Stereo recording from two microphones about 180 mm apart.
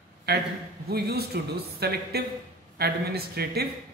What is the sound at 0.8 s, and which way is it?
Speech, 60° right (ahead or behind).